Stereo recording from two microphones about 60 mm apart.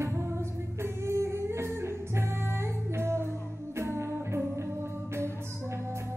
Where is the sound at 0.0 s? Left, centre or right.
Right.